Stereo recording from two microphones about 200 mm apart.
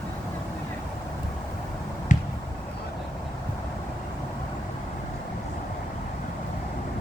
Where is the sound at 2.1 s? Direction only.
40° left (ahead or behind).